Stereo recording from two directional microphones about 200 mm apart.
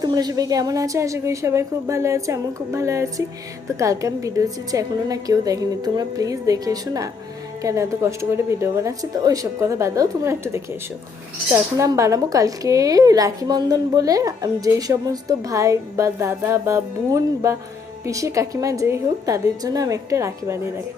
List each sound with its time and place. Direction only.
0.0 s speech: 20° right (ahead or behind)